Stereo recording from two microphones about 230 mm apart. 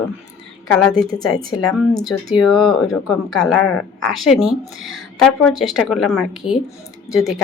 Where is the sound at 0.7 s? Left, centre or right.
Centre.